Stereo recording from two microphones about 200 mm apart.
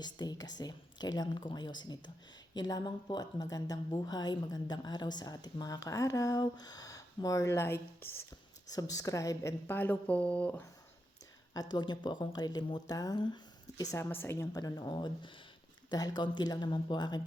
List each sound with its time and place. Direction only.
0.0 s a woman's voice: 20° left (ahead or behind)
11.7 s speech: 20° left (ahead or behind)